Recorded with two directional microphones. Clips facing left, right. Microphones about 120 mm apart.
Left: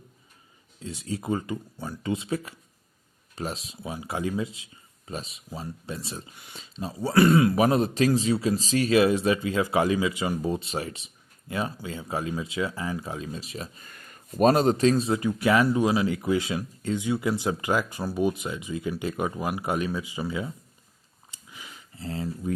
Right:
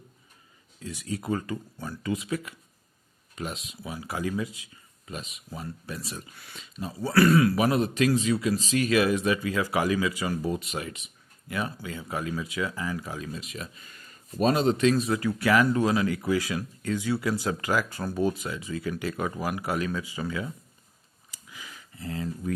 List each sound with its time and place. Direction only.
0.8 s speech: 25° left (ahead or behind)
2.0 s speech: 30° left (ahead or behind)
13.8 s speech: 55° left (ahead or behind); by 20.5 s 20° left (ahead or behind)
21.2 s a sound: 25° left (ahead or behind)